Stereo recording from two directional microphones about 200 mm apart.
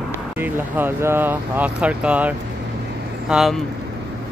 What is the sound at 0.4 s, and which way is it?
Speech, 10° right (ahead or behind).